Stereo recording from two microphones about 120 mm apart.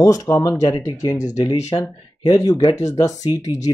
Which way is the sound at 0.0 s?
30° left (ahead or behind).